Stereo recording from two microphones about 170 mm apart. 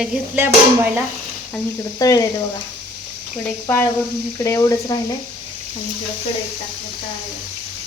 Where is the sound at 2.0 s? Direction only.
20° left (ahead or behind).